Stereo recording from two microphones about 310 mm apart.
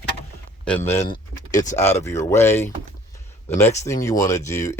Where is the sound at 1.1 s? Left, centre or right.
Centre.